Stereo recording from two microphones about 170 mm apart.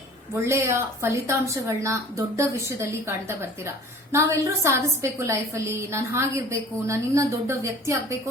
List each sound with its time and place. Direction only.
0.4 s a woman's voice: 15° right (ahead or behind)